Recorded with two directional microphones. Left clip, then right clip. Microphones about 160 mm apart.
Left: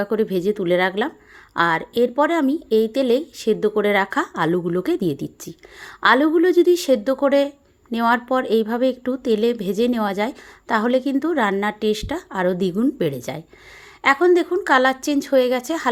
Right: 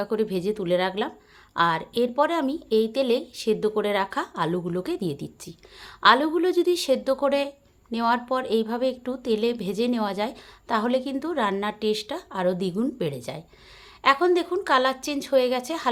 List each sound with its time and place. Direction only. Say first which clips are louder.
0.0 s speech: left 5 dB; 30° left (ahead or behind)